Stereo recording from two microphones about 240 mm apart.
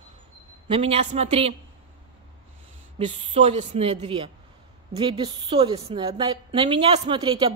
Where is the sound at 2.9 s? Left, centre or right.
Right.